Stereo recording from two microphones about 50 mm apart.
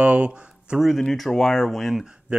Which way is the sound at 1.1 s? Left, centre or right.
Centre.